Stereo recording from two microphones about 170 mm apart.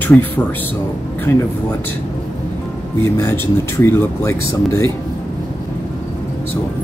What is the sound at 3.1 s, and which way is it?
Speech, 15° left (ahead or behind).